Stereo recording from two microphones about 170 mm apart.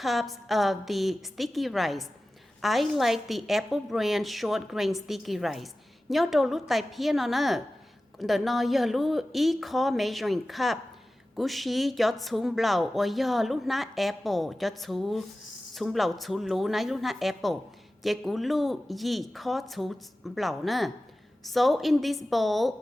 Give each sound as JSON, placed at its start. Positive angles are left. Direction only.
{"t": 0.0, "sound": "a woman's voice", "side_deg": 0}